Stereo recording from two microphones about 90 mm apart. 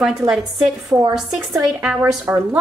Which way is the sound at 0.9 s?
35° right (ahead or behind).